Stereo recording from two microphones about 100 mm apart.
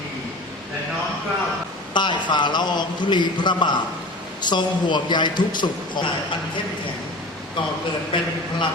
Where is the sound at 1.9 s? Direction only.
50° left (ahead or behind).